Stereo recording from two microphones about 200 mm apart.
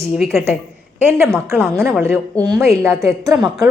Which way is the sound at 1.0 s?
10° right (ahead or behind).